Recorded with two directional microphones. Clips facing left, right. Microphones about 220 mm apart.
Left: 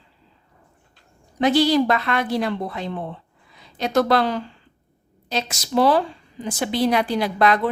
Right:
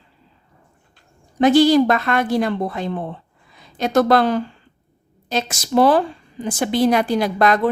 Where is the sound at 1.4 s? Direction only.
50° right (ahead or behind).